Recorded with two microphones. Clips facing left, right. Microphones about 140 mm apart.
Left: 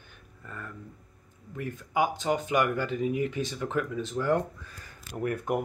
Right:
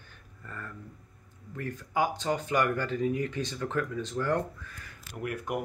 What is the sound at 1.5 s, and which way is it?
Speech, 15° left (ahead or behind).